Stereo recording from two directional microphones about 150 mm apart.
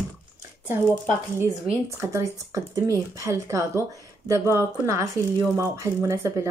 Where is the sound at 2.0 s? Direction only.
20° right (ahead or behind).